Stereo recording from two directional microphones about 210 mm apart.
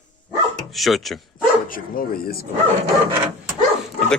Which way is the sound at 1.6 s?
40° left (ahead or behind).